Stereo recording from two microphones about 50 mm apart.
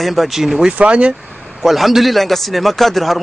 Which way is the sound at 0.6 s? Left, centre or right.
Right.